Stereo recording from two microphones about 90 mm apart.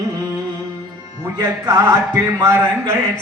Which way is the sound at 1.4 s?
35° right (ahead or behind).